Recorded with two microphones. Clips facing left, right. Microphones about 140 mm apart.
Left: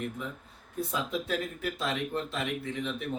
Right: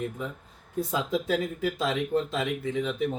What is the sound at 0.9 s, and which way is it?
Speech, 90° right.